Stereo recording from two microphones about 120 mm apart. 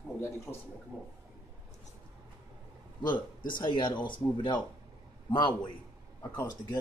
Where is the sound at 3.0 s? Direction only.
40° left (ahead or behind).